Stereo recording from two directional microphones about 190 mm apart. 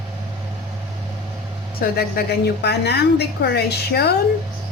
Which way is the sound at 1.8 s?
50° left (ahead or behind).